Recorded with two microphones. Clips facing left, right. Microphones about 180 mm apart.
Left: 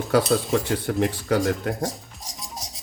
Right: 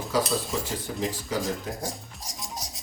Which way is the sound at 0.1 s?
65° left (ahead or behind).